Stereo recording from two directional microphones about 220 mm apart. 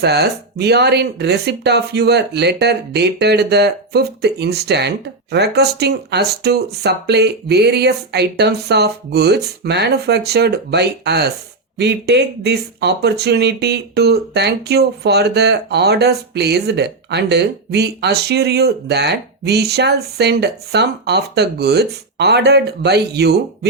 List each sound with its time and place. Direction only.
0.0 s speech: 45° right (ahead or behind)